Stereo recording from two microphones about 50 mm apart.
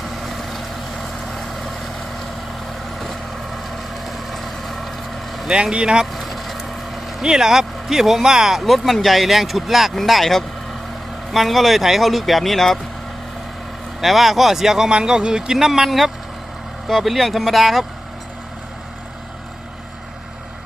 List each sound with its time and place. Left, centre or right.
1.3 s vehicle: centre
3.0 s vehicle: centre
5.7 s speech: centre
6.1 s vehicle: centre
7.3 s speech: centre
14.0 s speech: centre